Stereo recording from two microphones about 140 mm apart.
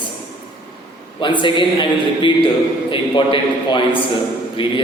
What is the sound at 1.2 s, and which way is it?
Speech, 35° left (ahead or behind).